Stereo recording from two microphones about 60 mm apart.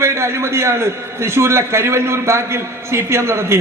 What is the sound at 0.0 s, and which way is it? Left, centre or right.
A man's voice, right.